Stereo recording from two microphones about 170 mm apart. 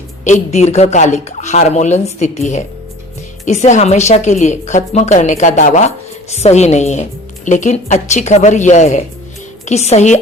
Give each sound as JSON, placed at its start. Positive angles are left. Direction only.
{"t": 0.3, "sound": "a woman's voice", "side_deg": 45}